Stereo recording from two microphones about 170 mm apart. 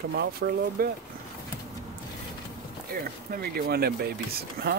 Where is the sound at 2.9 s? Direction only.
60° right (ahead or behind).